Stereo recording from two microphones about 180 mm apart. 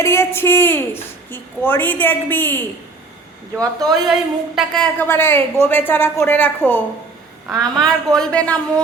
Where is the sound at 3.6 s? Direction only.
20° right (ahead or behind).